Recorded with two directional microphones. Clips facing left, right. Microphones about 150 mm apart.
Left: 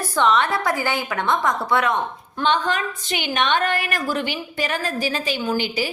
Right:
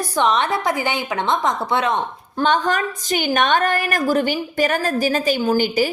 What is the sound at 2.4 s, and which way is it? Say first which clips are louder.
A woman's voice: right 3 dB; 45° right (ahead or behind).